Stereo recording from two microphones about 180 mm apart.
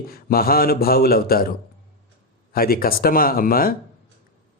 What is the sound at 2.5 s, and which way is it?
Speech, 55° left (ahead or behind).